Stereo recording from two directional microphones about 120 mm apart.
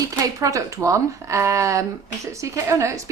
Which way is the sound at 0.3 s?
25° right (ahead or behind).